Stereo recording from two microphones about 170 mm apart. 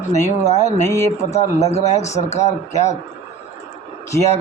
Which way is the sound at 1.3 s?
40° left (ahead or behind).